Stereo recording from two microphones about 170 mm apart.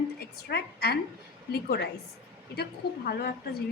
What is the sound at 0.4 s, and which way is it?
Speech, 70° left (ahead or behind).